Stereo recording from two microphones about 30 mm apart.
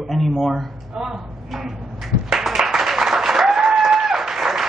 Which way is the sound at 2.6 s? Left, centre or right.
Centre.